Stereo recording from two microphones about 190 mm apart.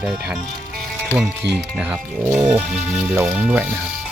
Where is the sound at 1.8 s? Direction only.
10° right (ahead or behind).